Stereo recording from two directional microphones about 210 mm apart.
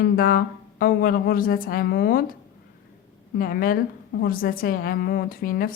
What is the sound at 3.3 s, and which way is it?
Speech, 45° left (ahead or behind).